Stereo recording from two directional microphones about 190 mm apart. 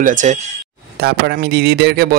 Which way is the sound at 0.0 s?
40° right (ahead or behind).